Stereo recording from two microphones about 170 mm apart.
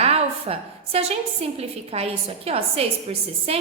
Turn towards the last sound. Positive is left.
turn(degrees=-35)  # may be behind; listen again after turning